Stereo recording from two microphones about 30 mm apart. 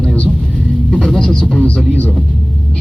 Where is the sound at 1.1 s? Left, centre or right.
Left.